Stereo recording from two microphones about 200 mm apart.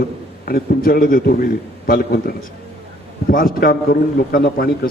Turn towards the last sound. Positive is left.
turn(degrees=50)  # may be behind; listen again after turning